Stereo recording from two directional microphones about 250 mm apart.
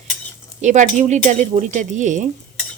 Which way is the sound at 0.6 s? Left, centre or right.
Right.